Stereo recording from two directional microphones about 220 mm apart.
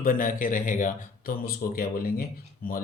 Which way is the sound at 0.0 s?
40° left (ahead or behind).